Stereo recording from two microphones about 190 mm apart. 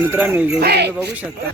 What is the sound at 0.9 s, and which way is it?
Speech, 10° right (ahead or behind).